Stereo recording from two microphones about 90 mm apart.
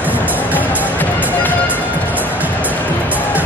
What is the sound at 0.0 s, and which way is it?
Music, 20° right (ahead or behind).